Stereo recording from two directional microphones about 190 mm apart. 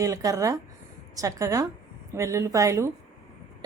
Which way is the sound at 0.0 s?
15° right (ahead or behind).